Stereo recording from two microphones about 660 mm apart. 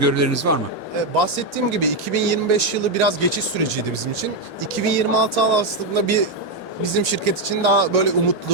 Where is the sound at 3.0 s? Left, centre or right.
Right.